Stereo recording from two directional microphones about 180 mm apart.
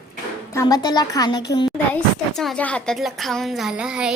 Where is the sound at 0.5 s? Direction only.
20° left (ahead or behind).